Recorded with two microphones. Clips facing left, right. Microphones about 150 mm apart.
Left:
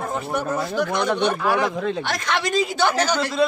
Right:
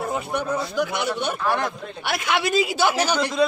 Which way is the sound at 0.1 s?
Centre (ahead or behind).